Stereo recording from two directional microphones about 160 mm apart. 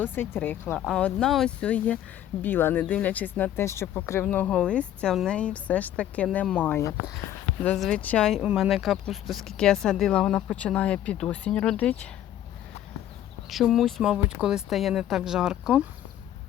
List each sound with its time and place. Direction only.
0.0 s speech: 10° left (ahead or behind)
8.4 s speech: 5° right (ahead or behind)
13.5 s speech: centre (ahead or behind)